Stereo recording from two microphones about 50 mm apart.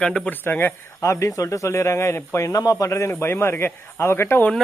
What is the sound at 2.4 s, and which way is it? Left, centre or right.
Speech, left.